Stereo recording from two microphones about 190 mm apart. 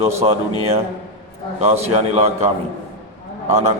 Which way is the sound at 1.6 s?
35° right (ahead or behind).